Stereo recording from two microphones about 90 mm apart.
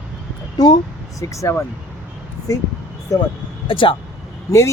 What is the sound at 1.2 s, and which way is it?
Speech, 35° left (ahead or behind).